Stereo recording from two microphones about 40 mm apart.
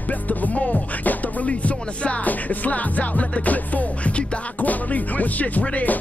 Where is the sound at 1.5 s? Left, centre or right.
Left.